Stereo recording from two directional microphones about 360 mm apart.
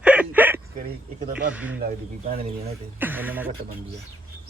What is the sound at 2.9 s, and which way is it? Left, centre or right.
Speech, centre.